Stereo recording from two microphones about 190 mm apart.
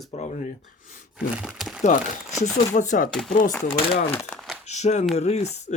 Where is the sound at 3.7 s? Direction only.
30° left (ahead or behind).